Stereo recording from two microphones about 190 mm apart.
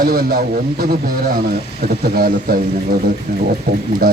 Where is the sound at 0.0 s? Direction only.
50° right (ahead or behind).